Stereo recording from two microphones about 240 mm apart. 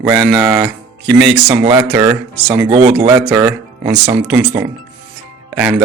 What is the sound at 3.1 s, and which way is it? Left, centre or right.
Speech, centre.